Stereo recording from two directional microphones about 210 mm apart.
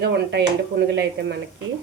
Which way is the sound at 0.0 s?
55° right (ahead or behind).